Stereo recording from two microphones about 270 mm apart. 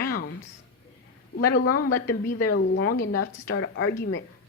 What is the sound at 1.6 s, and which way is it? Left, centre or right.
Speech, left.